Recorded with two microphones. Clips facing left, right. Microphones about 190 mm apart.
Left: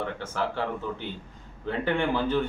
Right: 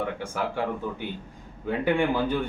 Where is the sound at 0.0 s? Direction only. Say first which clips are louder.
Right 1 dB; 10° right (ahead or behind).